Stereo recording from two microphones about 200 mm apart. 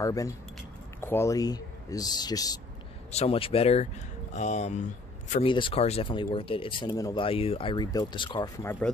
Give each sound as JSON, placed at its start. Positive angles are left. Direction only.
{"t": 0.0, "sound": "speech", "side_deg": 15}
{"t": 3.1, "sound": "speech", "side_deg": 30}
{"t": 5.5, "sound": "speech", "side_deg": 25}
{"t": 8.6, "sound": "speech", "side_deg": 5}